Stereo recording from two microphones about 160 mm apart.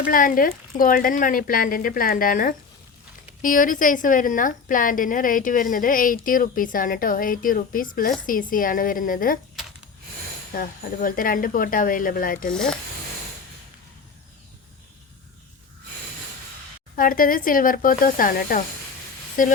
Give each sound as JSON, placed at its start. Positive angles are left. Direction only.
{"t": 0.1, "sound": "a woman's voice", "side_deg": 60}
{"t": 10.5, "sound": "a woman's voice", "side_deg": 60}
{"t": 12.5, "sound": "speech", "side_deg": 5}
{"t": 16.9, "sound": "a woman's voice", "side_deg": 60}